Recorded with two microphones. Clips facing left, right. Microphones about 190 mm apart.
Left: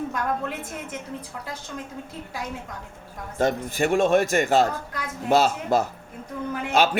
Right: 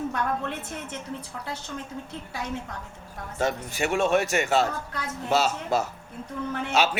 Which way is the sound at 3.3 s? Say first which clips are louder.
Left 4 dB; 50° left (ahead or behind).